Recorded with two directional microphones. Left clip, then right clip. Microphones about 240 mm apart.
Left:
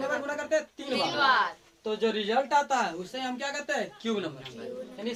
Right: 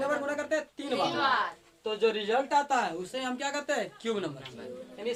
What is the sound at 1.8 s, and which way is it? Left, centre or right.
Speech, centre.